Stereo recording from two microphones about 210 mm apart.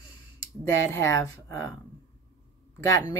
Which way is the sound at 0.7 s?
15° left (ahead or behind).